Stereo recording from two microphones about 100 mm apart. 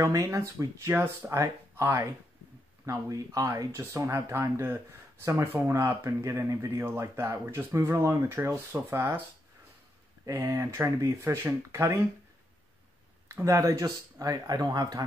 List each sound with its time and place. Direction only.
0.0 s speech: 35° right (ahead or behind)
10.2 s speech: 35° right (ahead or behind)
13.3 s speech: 30° right (ahead or behind)